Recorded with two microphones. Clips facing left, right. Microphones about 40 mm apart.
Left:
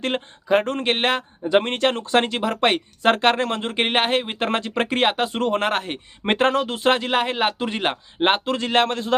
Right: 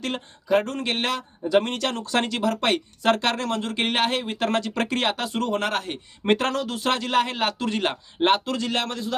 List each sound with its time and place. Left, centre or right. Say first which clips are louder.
0.0 s speech: left 5 dB; left